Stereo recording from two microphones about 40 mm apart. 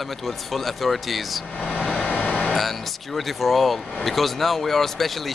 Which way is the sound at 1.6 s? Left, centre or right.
Left.